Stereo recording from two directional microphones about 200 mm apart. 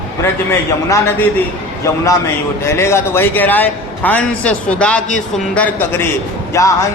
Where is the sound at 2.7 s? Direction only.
15° left (ahead or behind).